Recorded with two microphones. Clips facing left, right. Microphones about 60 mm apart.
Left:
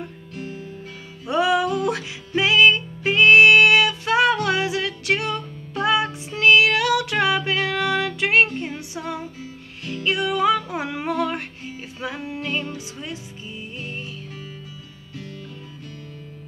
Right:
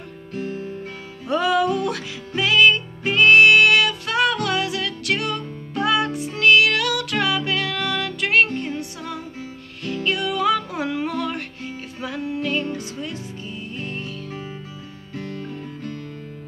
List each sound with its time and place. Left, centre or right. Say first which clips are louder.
0.3 s music: right 8 dB; right
1.2 s music: even; centre
1.9 s music: left 2 dB; centre
15.1 s music: right 6 dB; right